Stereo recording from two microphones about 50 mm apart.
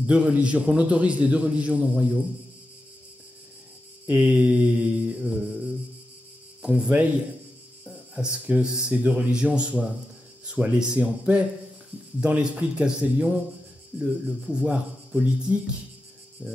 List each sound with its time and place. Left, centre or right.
0.0 s a man's voice: right
4.1 s a man's voice: right
6.8 s a man's voice: right
7.8 s a sound: right
8.6 s speech: centre
8.9 s a man's voice: right
16.4 s cricket: right